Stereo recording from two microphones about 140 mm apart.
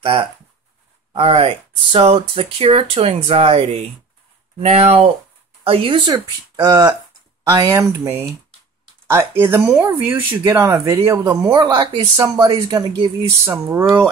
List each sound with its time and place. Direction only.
0.0 s speech: 40° right (ahead or behind); by 14.1 s 20° right (ahead or behind)